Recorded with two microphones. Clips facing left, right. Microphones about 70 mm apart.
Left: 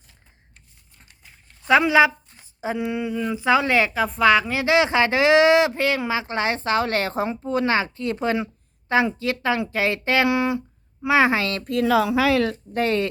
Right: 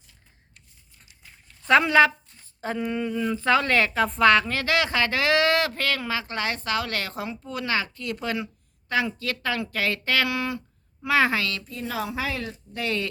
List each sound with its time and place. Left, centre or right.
1.2 s a sound: centre
2.4 s speech: centre
11.6 s speech: left
12.7 s speech: left